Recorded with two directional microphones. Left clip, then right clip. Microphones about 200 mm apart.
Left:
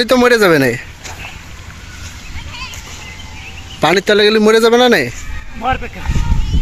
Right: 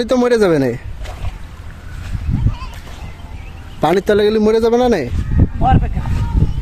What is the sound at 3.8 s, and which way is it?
Speech, 15° right (ahead or behind).